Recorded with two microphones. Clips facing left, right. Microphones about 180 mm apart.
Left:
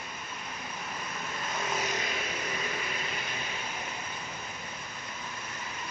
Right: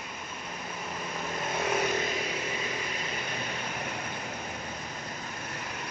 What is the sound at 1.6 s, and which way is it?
Vehicle, 60° right (ahead or behind).